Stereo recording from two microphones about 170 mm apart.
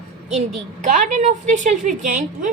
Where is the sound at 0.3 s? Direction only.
45° right (ahead or behind).